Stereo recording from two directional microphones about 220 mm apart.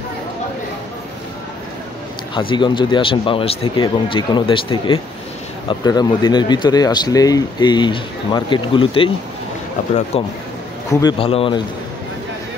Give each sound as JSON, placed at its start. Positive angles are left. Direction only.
{"t": 2.5, "sound": "speech", "side_deg": 20}
{"t": 10.1, "sound": "speech", "side_deg": 25}